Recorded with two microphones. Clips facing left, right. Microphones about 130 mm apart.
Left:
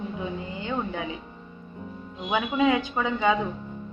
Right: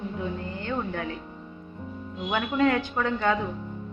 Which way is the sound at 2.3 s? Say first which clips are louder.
Left 1 dB; 10° left (ahead or behind).